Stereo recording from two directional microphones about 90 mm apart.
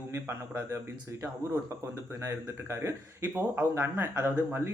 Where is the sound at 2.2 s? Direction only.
30° right (ahead or behind).